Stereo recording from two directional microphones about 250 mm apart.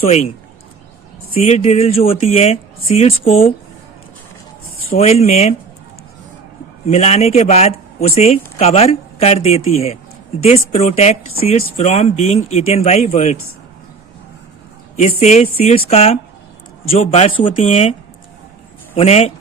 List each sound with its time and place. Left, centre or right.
0.0 s speech: left
4.9 s speech: left
6.8 s speech: left
14.9 s speech: left
18.9 s speech: left